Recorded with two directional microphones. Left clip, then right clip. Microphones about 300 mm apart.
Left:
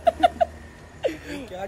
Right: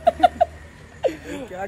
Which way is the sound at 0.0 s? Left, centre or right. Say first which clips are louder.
Right 3 dB; centre.